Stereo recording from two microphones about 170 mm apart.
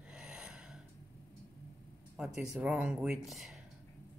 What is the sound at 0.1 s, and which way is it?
Gasp, 5° right (ahead or behind).